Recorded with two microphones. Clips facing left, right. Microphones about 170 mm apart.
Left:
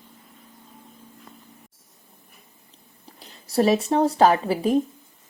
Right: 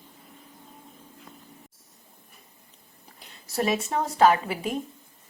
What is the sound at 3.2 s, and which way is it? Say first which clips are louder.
Speech: left 7 dB; 30° left (ahead or behind).